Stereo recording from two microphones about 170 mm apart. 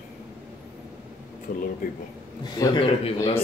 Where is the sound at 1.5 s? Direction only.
55° left (ahead or behind).